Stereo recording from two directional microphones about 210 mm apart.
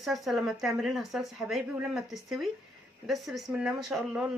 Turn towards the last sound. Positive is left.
turn(degrees=-5)  # may be behind; listen again after turning